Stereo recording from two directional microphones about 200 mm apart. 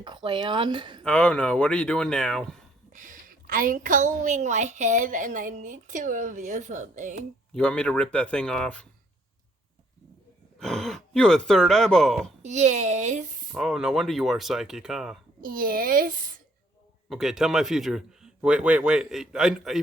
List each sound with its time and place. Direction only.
0.0 s speech: 25° right (ahead or behind)
1.0 s a man's voice: 5° left (ahead or behind)
2.9 s a woman's voice: 40° right (ahead or behind)
7.5 s a man's voice: 5° left (ahead or behind)
10.6 s a man's voice: centre (ahead or behind)
12.4 s a woman's voice: 35° right (ahead or behind)
13.5 s a man's voice: 5° right (ahead or behind)
15.4 s a child's voice: 45° right (ahead or behind)
17.1 s a man's voice: centre (ahead or behind)